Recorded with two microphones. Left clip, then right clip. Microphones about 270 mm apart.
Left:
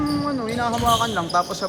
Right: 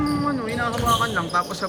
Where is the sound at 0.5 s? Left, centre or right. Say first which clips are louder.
Left 3 dB; centre.